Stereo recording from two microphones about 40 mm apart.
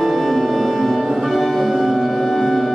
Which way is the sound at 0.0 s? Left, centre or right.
Centre.